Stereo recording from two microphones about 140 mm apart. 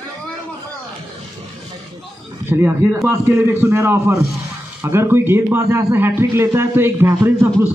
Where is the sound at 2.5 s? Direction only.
15° right (ahead or behind).